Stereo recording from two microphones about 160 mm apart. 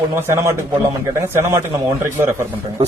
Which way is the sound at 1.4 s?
20° right (ahead or behind).